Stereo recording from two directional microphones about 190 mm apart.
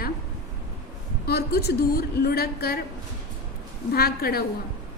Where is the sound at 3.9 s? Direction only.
55° left (ahead or behind).